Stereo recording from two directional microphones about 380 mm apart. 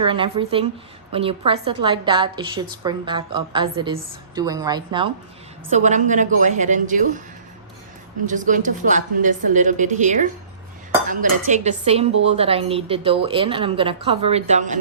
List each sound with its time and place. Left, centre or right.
0.0 s a woman's voice: centre
8.3 s a woman's voice: centre